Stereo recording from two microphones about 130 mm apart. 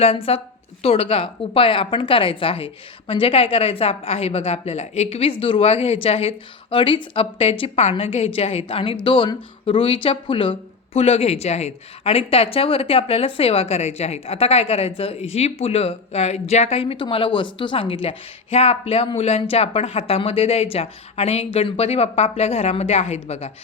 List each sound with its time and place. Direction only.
0.0 s a woman's voice: 50° left (ahead or behind)